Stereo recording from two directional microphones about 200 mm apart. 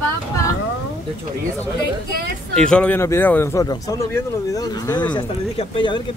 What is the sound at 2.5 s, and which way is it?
Speech, 5° left (ahead or behind).